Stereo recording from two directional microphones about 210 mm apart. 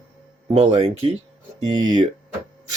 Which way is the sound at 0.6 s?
25° right (ahead or behind).